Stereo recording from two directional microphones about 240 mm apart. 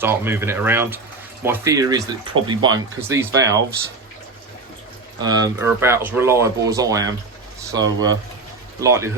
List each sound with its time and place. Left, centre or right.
0.0 s speech: centre
5.2 s speech: centre